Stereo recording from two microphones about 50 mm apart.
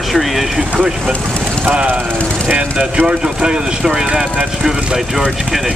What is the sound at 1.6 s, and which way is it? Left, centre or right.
Speech, right.